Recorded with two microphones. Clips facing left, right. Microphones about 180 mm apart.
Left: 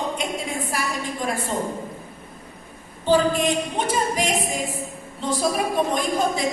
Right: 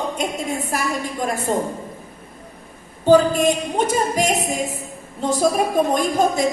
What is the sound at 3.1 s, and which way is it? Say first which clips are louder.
A woman's voice: right 5 dB; 45° right (ahead or behind).